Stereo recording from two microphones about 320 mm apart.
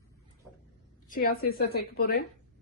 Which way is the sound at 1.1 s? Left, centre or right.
Left.